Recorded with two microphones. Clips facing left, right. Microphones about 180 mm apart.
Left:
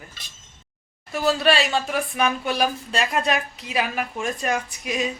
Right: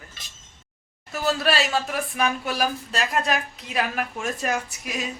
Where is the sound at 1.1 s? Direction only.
Centre (ahead or behind).